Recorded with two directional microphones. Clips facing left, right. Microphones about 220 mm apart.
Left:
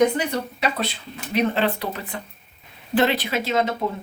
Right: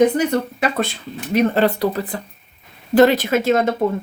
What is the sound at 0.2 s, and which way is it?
Speech, 50° right (ahead or behind).